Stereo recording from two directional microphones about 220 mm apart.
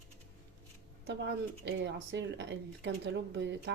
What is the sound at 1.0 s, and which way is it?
Speech, 50° right (ahead or behind).